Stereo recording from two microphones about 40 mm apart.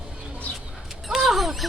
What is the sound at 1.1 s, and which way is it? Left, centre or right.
Speech, centre.